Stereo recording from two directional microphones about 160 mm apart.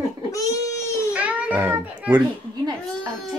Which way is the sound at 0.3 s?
20° left (ahead or behind).